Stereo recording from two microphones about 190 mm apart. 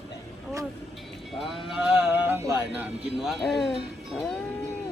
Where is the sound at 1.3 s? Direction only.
Centre (ahead or behind).